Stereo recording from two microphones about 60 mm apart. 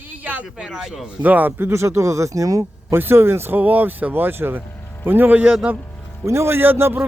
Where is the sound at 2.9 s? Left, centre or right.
Right.